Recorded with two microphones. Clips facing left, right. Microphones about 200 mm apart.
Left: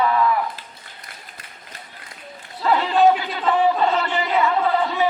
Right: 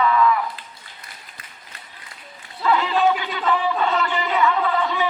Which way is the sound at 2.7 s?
35° left (ahead or behind).